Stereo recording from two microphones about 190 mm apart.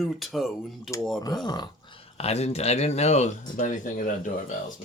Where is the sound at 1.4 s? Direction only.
20° left (ahead or behind).